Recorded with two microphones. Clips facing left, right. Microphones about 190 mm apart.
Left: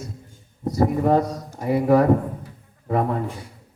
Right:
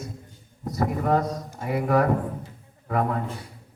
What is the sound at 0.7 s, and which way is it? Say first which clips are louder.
Speech: left 5 dB; 30° left (ahead or behind).